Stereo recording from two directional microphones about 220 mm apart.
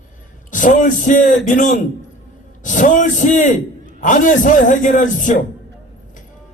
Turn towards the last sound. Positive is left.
turn(degrees=35)  # may be behind; listen again after turning